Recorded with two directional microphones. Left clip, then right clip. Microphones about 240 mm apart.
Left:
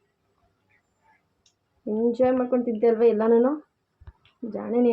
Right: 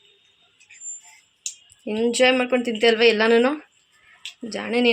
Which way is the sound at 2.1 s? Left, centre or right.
Right.